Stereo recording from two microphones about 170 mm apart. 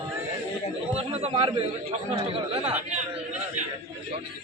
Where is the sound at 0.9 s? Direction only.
40° right (ahead or behind).